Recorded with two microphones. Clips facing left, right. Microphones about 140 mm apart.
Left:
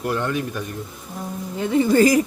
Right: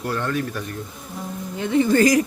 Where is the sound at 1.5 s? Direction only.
5° left (ahead or behind).